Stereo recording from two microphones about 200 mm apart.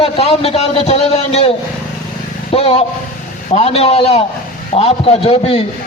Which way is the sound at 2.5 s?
30° left (ahead or behind).